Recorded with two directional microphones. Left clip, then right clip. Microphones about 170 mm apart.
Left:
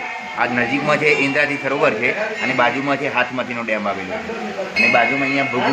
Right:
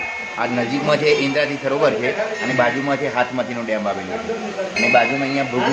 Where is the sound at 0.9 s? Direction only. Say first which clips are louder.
Even; 15° right (ahead or behind).